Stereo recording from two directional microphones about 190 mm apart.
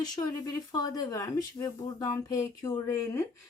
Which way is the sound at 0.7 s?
20° left (ahead or behind).